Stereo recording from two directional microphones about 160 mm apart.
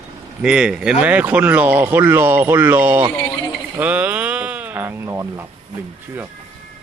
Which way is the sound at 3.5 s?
10° right (ahead or behind).